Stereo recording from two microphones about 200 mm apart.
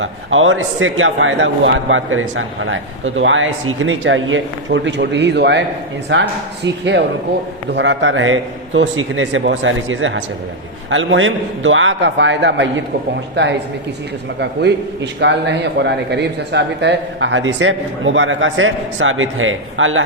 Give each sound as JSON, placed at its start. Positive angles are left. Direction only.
{"t": 0.0, "sound": "a man's voice", "side_deg": -80}
{"t": 7.7, "sound": "a man's voice", "side_deg": -65}